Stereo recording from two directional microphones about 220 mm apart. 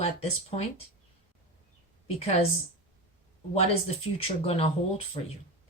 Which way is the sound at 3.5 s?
30° left (ahead or behind).